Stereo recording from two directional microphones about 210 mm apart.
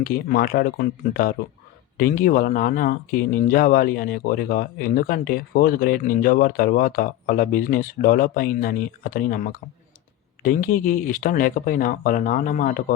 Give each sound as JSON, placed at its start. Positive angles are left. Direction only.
{"t": 0.0, "sound": "speech", "side_deg": 45}